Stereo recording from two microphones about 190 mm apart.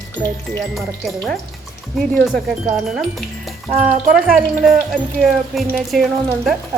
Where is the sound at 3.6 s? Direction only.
40° right (ahead or behind).